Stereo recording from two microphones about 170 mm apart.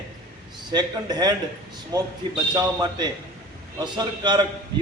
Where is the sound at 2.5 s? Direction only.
25° right (ahead or behind).